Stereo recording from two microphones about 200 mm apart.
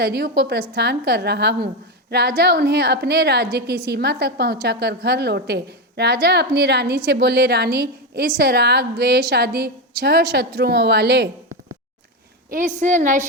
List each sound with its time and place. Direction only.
0.0 s a woman's voice: 50° right (ahead or behind)
12.5 s a woman's voice: 40° right (ahead or behind)